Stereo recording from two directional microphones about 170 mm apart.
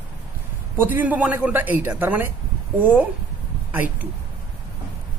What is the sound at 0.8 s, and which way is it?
A man's voice, 10° right (ahead or behind).